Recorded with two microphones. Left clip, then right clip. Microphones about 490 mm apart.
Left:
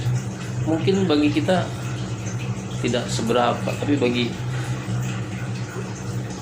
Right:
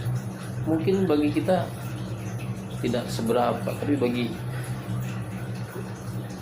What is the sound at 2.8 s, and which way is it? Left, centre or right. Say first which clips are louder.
Speech: left 4 dB; right.